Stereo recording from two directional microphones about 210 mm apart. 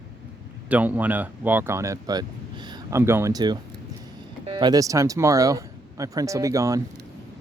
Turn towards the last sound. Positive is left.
turn(degrees=-15)  # may be behind; listen again after turning